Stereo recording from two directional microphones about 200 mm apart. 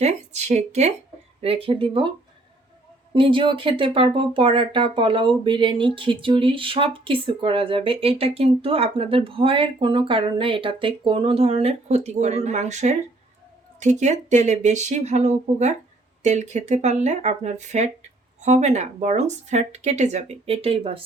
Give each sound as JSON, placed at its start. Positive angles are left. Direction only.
{"t": 0.0, "sound": "speech", "side_deg": -35}
{"t": 3.2, "sound": "speech", "side_deg": -25}